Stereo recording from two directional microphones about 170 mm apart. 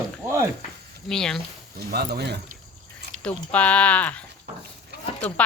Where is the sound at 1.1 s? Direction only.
5° left (ahead or behind).